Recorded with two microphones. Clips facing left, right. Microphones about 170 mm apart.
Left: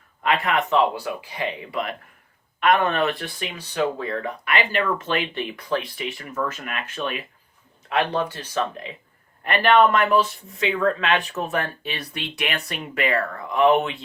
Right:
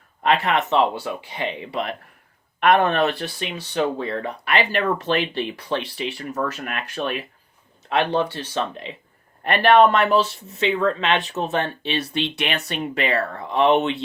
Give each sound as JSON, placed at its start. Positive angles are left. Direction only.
{"t": 0.4, "sound": "speech", "side_deg": -30}